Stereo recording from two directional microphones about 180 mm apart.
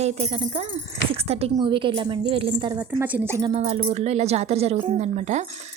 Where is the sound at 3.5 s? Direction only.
40° right (ahead or behind).